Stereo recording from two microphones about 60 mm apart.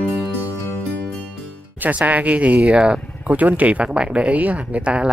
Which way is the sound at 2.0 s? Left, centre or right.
Right.